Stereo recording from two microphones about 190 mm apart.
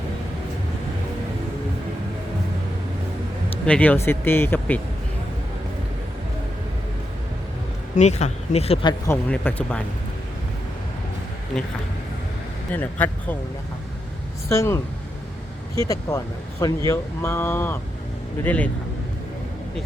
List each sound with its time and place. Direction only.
3.7 s speech: 10° left (ahead or behind)
7.9 s speech: 35° left (ahead or behind)
9.3 s speech: 10° left (ahead or behind)
11.5 s speech: centre (ahead or behind)
12.7 s speech: 10° left (ahead or behind)
14.5 s speech: 15° left (ahead or behind)
15.8 s speech: 15° left (ahead or behind)